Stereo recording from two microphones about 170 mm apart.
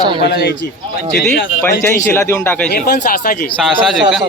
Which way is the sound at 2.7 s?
65° left (ahead or behind).